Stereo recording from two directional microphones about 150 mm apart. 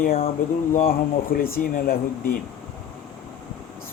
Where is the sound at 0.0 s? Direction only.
70° left (ahead or behind).